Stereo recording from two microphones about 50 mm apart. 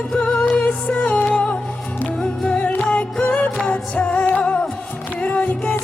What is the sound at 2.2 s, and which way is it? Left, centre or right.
Music, centre.